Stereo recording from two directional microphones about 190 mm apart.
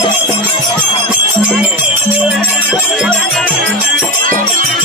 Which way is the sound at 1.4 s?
5° right (ahead or behind).